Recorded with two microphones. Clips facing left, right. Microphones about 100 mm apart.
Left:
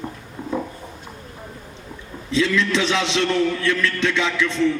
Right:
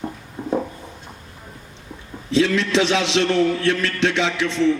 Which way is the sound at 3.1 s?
60° right (ahead or behind).